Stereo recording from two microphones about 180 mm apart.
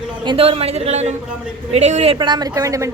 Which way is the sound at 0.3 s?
35° right (ahead or behind).